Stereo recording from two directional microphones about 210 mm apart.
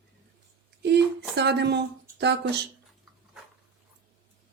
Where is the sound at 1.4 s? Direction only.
55° right (ahead or behind).